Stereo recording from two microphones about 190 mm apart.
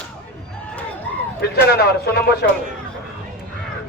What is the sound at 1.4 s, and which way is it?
Speech, 55° left (ahead or behind).